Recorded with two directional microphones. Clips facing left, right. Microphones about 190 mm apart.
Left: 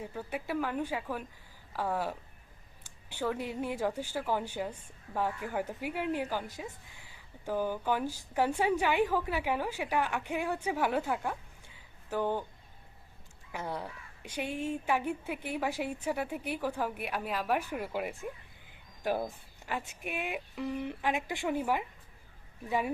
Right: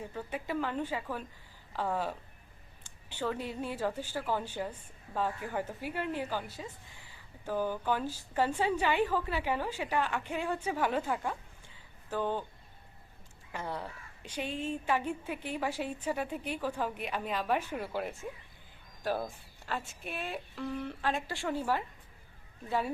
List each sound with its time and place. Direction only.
0.0 s a woman's voice: 10° left (ahead or behind)
13.5 s a woman's voice: 10° left (ahead or behind)